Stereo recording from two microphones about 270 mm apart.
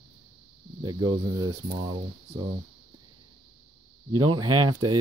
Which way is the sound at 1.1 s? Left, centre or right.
Centre.